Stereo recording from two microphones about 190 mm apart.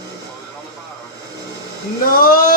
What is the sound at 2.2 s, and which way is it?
Speech, 45° left (ahead or behind).